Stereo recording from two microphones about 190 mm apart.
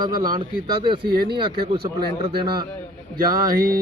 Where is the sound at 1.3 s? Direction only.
25° right (ahead or behind).